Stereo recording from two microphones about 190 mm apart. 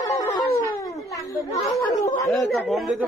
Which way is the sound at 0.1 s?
15° left (ahead or behind).